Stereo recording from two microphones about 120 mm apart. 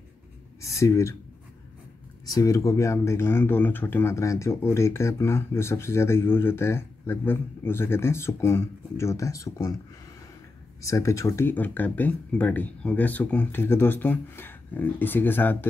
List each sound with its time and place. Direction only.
0.6 s speech: 25° left (ahead or behind)
2.2 s speech: 30° left (ahead or behind)
10.8 s speech: 25° left (ahead or behind)